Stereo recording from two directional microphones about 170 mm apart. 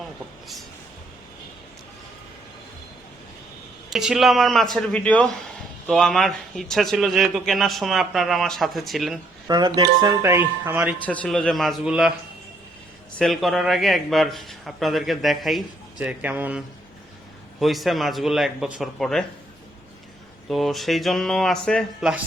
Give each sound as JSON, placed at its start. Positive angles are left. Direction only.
{"t": 3.8, "sound": "a man's voice", "side_deg": 0}
{"t": 9.5, "sound": "speech", "side_deg": -25}
{"t": 11.0, "sound": "a man's voice", "side_deg": 10}
{"t": 13.1, "sound": "a man's voice", "side_deg": 0}
{"t": 20.5, "sound": "a man's voice", "side_deg": 0}